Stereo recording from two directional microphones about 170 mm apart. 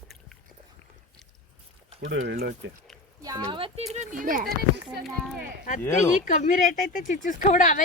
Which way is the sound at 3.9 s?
45° right (ahead or behind).